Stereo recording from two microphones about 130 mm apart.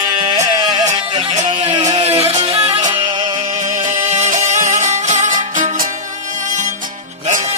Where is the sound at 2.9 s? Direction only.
35° right (ahead or behind).